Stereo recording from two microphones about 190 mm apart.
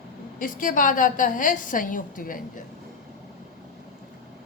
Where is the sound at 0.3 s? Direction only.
45° left (ahead or behind).